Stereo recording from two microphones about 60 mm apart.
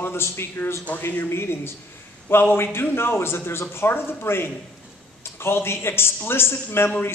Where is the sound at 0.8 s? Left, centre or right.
Left.